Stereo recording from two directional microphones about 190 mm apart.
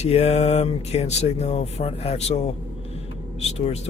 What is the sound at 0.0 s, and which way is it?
Speech, 35° left (ahead or behind).